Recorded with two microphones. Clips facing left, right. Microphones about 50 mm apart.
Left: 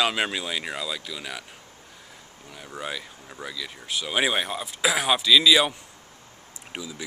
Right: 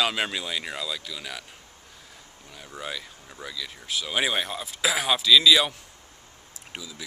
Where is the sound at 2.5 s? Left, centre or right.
Centre.